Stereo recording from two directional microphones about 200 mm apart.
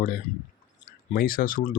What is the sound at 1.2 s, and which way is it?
Speech, 45° left (ahead or behind).